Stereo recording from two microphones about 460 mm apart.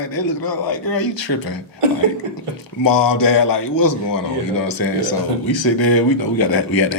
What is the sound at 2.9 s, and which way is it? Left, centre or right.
Speech, left.